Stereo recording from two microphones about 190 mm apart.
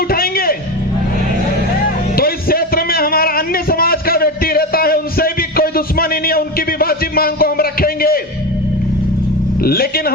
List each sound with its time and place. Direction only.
0.1 s music: 50° left (ahead or behind)
2.1 s a sound: 50° left (ahead or behind)
9.6 s speech: 50° left (ahead or behind)